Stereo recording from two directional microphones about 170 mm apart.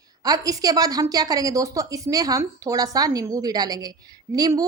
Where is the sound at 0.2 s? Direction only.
20° right (ahead or behind).